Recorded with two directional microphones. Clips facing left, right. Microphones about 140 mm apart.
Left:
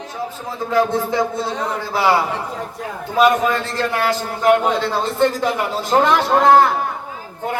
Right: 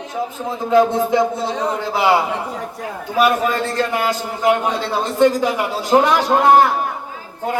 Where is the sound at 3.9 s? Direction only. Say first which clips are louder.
Even; 15° right (ahead or behind).